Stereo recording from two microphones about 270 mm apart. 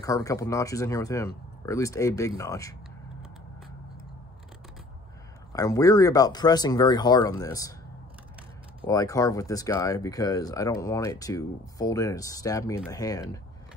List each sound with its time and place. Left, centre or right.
0.0 s speech: centre
5.5 s speech: centre
8.8 s speech: centre